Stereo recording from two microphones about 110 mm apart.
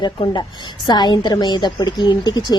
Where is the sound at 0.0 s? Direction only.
45° left (ahead or behind).